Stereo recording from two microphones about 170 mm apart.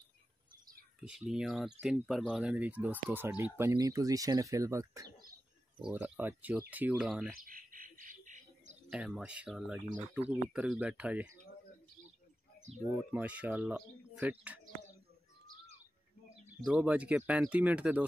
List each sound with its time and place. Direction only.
1.0 s speech: 5° right (ahead or behind)
7.4 s bird: 55° right (ahead or behind)
8.9 s speech: 5° right (ahead or behind)
12.8 s speech: 5° right (ahead or behind)
16.6 s speech: 5° right (ahead or behind)